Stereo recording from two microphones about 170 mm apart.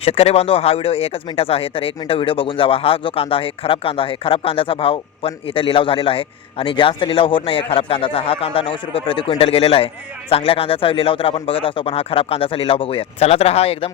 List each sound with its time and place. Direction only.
0.0 s speech: 35° left (ahead or behind)